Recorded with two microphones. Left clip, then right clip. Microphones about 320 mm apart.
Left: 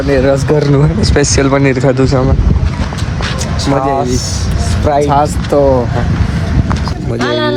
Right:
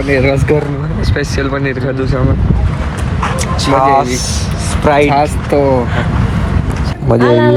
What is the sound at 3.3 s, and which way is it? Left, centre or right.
Speech, right.